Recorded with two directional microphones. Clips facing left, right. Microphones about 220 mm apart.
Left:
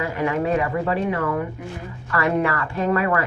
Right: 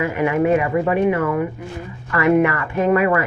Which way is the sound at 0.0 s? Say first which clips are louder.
Right 5 dB; 15° right (ahead or behind).